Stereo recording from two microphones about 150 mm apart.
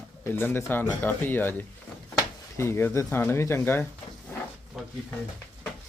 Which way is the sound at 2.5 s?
15° left (ahead or behind).